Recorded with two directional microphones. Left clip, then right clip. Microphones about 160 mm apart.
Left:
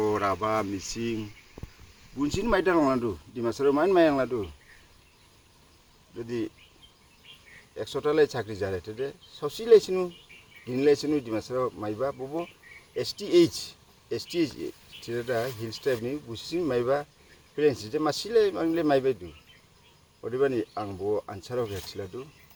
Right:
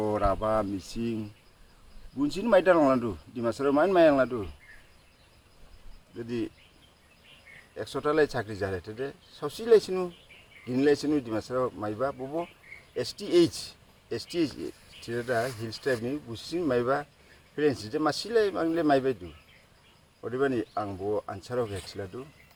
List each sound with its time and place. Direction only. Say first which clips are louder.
0.2 s speech: even; 5° right (ahead or behind)
0.4 s a man's voice: even; 15° right (ahead or behind)
2.5 s speech: right 3 dB; 5° right (ahead or behind)
6.2 s a man's voice: left 1 dB; 10° right (ahead or behind)
7.8 s a man's voice: left 2 dB; centre (ahead or behind)